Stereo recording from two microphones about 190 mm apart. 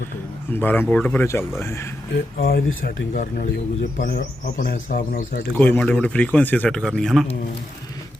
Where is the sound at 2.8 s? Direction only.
45° left (ahead or behind).